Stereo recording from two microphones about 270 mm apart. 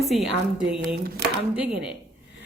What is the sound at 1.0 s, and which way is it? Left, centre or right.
Speech, right.